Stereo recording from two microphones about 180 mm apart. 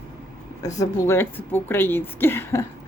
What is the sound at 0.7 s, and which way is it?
A woman's voice, 15° left (ahead or behind).